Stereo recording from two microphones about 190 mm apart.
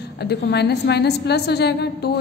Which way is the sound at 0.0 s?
60° left (ahead or behind).